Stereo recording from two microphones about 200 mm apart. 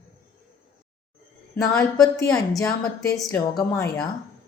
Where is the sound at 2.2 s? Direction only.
15° left (ahead or behind).